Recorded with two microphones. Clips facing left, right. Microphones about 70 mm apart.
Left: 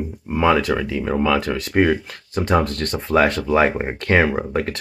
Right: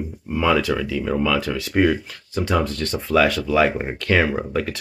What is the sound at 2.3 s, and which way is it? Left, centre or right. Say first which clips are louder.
Speech: left 2 dB; left.